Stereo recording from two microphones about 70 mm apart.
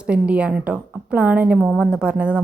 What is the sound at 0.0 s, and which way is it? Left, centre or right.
A woman's voice, centre.